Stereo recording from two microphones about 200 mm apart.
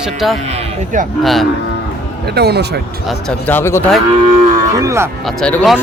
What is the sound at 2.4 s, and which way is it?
Speech, 55° right (ahead or behind).